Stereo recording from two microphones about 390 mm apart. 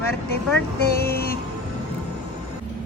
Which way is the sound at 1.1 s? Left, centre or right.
Left.